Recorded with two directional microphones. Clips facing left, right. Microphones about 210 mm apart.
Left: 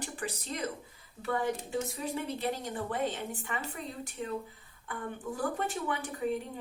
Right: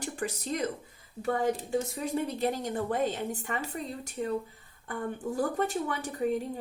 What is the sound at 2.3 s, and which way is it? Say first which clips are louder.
A woman's voice: right 4 dB; 45° right (ahead or behind).